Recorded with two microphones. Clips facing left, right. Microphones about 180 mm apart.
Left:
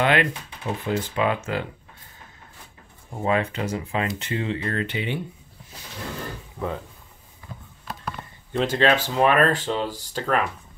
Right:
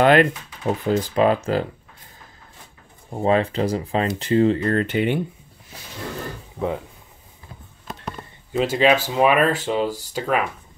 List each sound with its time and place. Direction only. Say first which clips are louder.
0.0 s speech: right 6 dB; 40° right (ahead or behind)
3.1 s speech: right 4 dB; 30° right (ahead or behind); by 5.2 s 50° right (ahead or behind)
8.5 s speech: right 3 dB; 5° right (ahead or behind)